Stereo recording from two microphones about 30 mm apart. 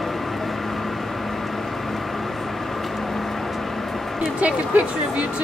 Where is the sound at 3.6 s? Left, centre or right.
Centre.